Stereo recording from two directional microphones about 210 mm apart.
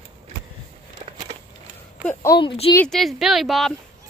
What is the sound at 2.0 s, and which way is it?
Speech, 10° left (ahead or behind).